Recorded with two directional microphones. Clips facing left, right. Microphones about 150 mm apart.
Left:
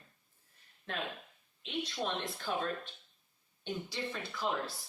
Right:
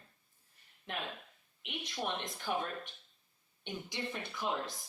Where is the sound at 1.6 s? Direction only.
15° right (ahead or behind).